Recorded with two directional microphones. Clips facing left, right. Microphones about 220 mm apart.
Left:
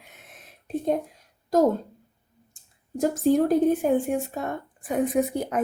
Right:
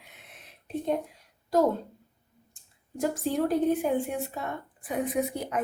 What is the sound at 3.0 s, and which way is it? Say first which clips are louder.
Speech: left 6 dB; 45° left (ahead or behind).